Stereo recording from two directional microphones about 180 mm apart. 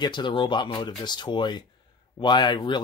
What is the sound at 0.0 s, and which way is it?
Speech, 25° left (ahead or behind).